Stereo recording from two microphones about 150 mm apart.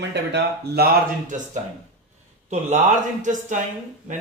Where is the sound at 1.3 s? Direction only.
55° right (ahead or behind).